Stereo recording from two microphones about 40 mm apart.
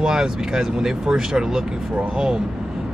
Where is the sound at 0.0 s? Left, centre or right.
Centre.